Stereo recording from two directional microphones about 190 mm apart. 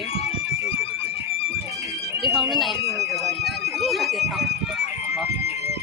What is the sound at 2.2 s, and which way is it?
Alarm, centre (ahead or behind).